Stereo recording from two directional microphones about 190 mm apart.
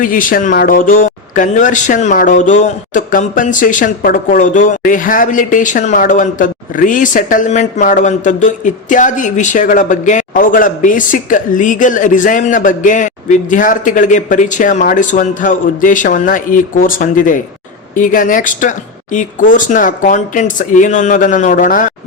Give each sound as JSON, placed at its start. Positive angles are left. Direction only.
{"t": 0.0, "sound": "a man's voice", "side_deg": 45}